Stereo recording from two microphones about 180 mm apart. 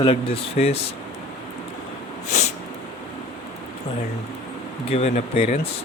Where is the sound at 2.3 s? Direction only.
40° left (ahead or behind).